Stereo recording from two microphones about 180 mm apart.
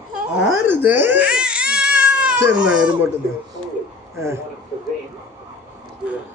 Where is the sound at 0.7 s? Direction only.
10° right (ahead or behind).